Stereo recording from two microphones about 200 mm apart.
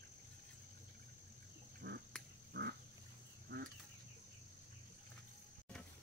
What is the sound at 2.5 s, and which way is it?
Roaring cats, 55° right (ahead or behind).